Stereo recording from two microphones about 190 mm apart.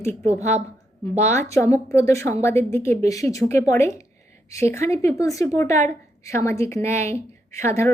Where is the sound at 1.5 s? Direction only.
15° left (ahead or behind).